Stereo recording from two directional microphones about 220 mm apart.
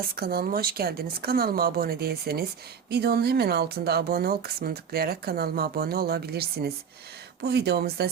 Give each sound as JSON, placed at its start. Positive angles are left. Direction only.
{"t": 0.2, "sound": "speech", "side_deg": -45}